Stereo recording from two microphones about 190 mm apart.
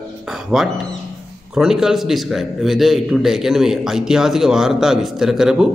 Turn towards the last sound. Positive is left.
turn(degrees=-5)  # may be behind; listen again after turning